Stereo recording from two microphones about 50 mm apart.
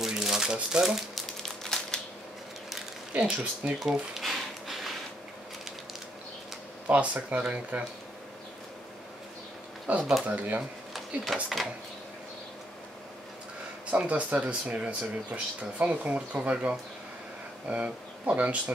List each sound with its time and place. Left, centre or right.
0.0 s crumpling: centre
1.1 s a sound: centre
3.1 s speech: right
3.8 s speech: centre
4.2 s a sound: centre
6.9 s speech: right
9.9 s speech: right
11.4 s speech: centre
13.8 s speech: right